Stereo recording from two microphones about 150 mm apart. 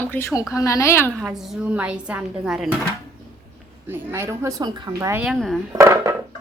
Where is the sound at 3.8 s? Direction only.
15° right (ahead or behind).